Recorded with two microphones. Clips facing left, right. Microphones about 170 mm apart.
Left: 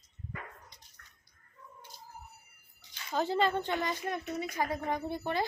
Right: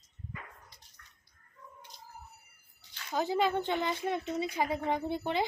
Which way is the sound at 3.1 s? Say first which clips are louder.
Even; 10° right (ahead or behind).